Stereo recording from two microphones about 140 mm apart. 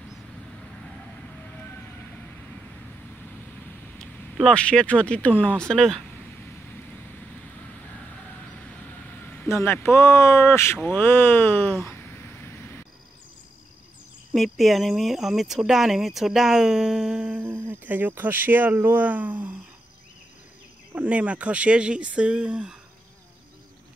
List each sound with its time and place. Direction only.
4.0 s speech: 5° left (ahead or behind)
8.5 s vehicle: 10° left (ahead or behind)
14.3 s speech: centre (ahead or behind)
20.9 s speech: 10° right (ahead or behind)